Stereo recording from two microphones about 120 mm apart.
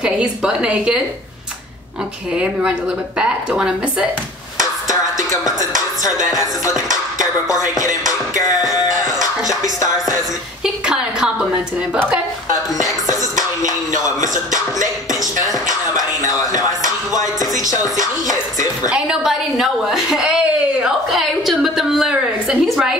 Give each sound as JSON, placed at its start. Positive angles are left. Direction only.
{"t": 0.0, "sound": "a woman's voice", "side_deg": -5}
{"t": 2.3, "sound": "a woman's voice", "side_deg": -10}
{"t": 5.3, "sound": "music", "side_deg": 30}
{"t": 10.6, "sound": "a woman's voice", "side_deg": -5}
{"t": 12.7, "sound": "music", "side_deg": 30}
{"t": 15.7, "sound": "speech", "side_deg": 30}
{"t": 17.1, "sound": "music", "side_deg": 30}
{"t": 18.9, "sound": "a woman's voice", "side_deg": -5}